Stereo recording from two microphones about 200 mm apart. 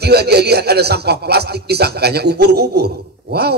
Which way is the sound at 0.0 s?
55° right (ahead or behind).